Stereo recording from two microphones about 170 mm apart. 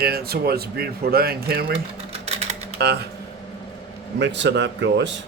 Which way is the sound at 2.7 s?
75° right (ahead or behind).